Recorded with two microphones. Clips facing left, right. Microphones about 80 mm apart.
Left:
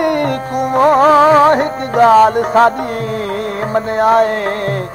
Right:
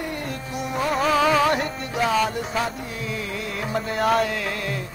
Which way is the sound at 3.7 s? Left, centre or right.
Left.